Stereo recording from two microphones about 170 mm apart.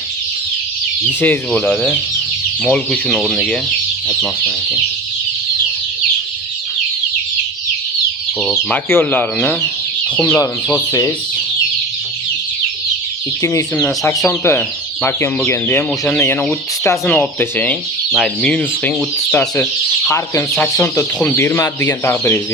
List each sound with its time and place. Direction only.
1.2 s speech: 10° left (ahead or behind)
8.4 s speech: centre (ahead or behind)
8.9 s speech: 10° left (ahead or behind)
13.4 s speech: 20° left (ahead or behind)